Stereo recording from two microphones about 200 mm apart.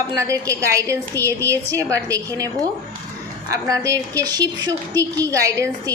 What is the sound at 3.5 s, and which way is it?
A woman's voice, 15° right (ahead or behind).